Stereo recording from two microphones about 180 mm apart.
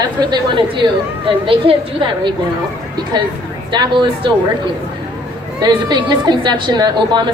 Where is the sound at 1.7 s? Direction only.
30° right (ahead or behind).